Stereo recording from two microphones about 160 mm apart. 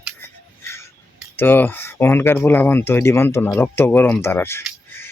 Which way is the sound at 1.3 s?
15° left (ahead or behind).